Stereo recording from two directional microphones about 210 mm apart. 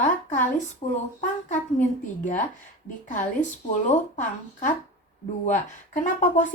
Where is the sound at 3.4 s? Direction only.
35° left (ahead or behind).